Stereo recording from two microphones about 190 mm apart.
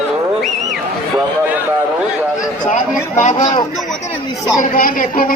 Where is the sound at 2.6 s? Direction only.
40° left (ahead or behind).